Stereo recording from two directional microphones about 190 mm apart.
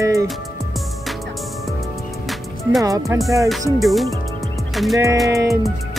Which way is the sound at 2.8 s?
15° right (ahead or behind).